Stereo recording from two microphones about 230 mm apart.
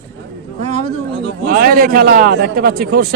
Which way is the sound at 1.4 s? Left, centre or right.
Right.